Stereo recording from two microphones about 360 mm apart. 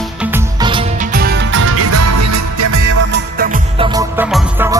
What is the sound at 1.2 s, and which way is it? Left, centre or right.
Music, right.